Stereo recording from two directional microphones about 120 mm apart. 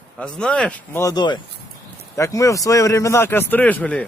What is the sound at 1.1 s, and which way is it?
Speech, 40° left (ahead or behind).